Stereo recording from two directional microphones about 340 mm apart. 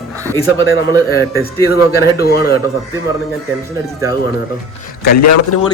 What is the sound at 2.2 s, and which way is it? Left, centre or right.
Speech, left.